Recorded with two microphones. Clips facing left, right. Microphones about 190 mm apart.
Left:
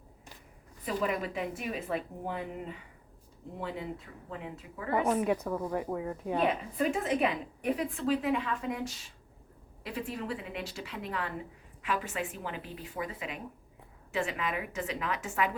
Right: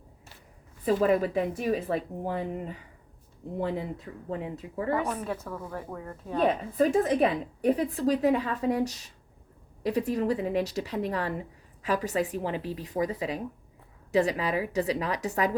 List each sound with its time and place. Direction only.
0.9 s a woman's voice: 35° right (ahead or behind)
4.9 s a woman's voice: 15° left (ahead or behind)
6.7 s a woman's voice: 40° right (ahead or behind)